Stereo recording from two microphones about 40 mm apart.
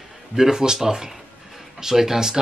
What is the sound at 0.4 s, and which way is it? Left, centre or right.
Speech, centre.